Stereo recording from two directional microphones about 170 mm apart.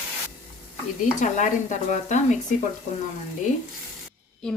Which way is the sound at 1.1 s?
45° left (ahead or behind).